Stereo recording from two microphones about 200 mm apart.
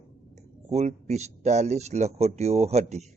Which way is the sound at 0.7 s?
35° right (ahead or behind).